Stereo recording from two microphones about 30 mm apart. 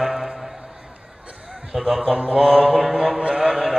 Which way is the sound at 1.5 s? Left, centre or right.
Centre.